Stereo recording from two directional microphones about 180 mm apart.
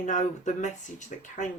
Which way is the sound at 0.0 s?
40° left (ahead or behind).